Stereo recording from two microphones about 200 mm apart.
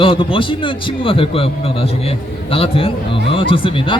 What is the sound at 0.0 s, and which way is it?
Speech, 25° left (ahead or behind).